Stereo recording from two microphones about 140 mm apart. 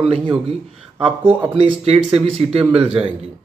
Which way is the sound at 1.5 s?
45° right (ahead or behind).